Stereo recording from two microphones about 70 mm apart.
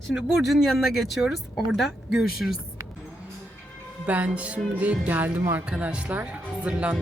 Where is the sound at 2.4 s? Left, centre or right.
Centre.